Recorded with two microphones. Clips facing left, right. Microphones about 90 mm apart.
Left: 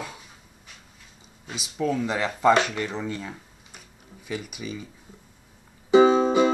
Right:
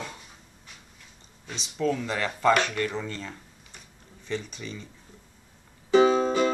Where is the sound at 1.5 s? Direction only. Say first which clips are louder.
Left 1 dB; 10° left (ahead or behind).